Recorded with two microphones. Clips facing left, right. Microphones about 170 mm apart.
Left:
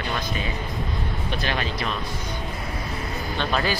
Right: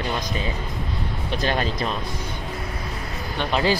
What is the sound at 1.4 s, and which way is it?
Speech, 40° right (ahead or behind).